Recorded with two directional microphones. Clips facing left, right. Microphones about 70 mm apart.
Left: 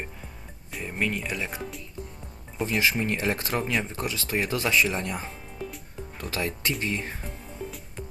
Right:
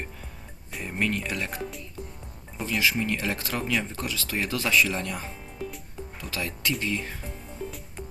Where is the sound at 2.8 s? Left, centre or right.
Left.